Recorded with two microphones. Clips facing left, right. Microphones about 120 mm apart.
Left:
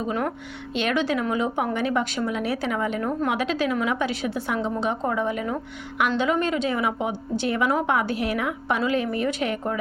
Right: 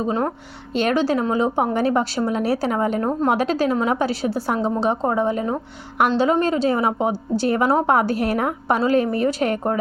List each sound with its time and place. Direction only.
0.0 s speech: 30° right (ahead or behind)